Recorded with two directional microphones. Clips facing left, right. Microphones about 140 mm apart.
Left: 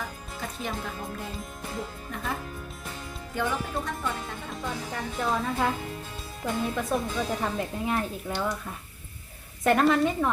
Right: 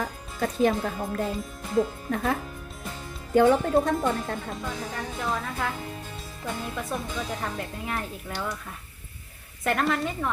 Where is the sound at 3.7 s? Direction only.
45° right (ahead or behind).